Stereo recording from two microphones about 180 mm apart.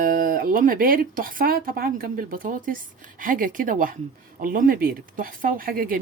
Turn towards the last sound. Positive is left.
turn(degrees=-50)  # may be behind; listen again after turning